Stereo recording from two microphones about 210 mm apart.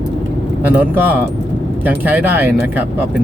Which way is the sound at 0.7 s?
10° right (ahead or behind).